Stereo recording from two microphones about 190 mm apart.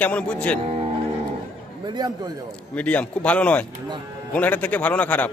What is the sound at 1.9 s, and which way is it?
Speech, 20° right (ahead or behind).